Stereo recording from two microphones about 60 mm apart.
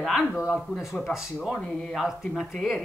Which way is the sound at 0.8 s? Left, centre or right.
Centre.